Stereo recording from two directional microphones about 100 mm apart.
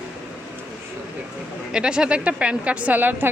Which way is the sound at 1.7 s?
10° right (ahead or behind).